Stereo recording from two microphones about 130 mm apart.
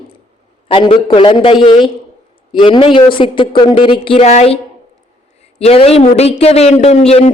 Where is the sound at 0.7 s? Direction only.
40° left (ahead or behind).